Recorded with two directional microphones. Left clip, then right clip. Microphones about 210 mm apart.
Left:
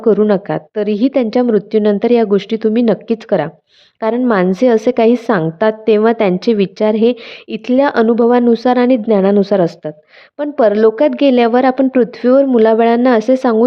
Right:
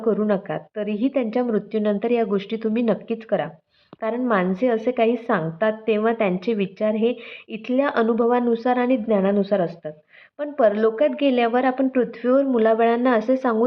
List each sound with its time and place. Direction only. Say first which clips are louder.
0.0 s a woman's voice: left 10 dB; 50° left (ahead or behind)